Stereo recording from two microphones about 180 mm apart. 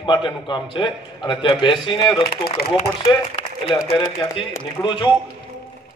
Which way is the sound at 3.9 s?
25° left (ahead or behind).